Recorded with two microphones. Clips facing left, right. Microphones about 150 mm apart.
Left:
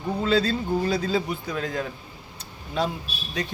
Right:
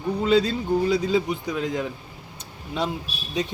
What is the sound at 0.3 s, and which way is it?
A man's voice, 15° right (ahead or behind).